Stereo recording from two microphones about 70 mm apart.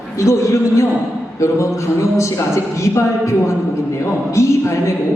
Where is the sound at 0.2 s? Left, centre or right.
Left.